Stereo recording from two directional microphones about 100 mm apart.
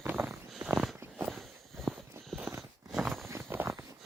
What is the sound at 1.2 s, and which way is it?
Walk, centre (ahead or behind).